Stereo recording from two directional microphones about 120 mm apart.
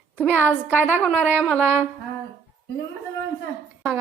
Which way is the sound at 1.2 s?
15° right (ahead or behind).